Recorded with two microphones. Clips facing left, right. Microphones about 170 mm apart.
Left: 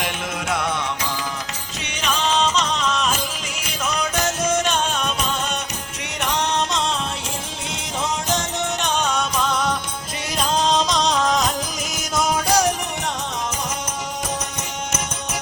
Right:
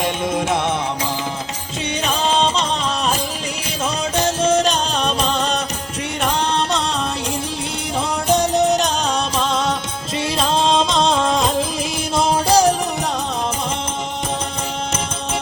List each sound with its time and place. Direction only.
0.0 s music: 30° right (ahead or behind)
2.0 s music: 35° right (ahead or behind)
8.3 s music: 35° right (ahead or behind)